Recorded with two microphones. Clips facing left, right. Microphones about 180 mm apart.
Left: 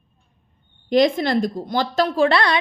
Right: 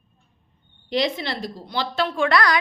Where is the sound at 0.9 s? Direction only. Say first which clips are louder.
Left 8 dB; 45° left (ahead or behind); by 2.6 s 25° left (ahead or behind).